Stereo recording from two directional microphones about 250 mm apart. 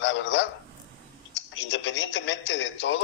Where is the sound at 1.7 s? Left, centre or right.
Left.